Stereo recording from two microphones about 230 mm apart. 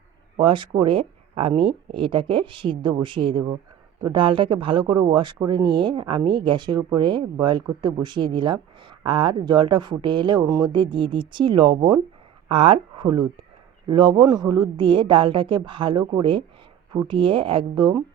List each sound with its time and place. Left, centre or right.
0.3 s speech: right